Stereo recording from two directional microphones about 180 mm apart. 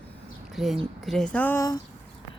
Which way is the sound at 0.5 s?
Centre (ahead or behind).